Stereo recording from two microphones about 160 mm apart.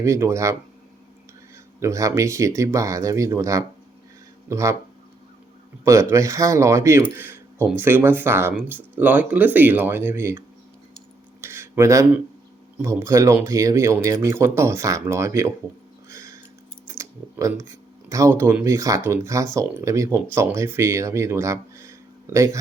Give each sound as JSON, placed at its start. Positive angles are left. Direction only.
{"t": 0.0, "sound": "speech", "side_deg": -20}
{"t": 1.8, "sound": "speech", "side_deg": -20}
{"t": 5.8, "sound": "speech", "side_deg": -20}
{"t": 11.3, "sound": "a sound", "side_deg": -15}
{"t": 12.8, "sound": "speech", "side_deg": -20}
{"t": 16.0, "sound": "a sound", "side_deg": -20}
{"t": 16.8, "sound": "speech", "side_deg": -20}